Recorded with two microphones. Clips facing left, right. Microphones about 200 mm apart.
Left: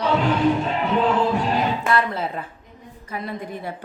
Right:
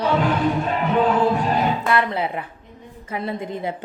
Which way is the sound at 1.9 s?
15° right (ahead or behind).